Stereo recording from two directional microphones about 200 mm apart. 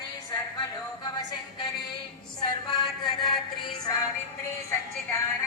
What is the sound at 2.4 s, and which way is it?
Music, 20° left (ahead or behind).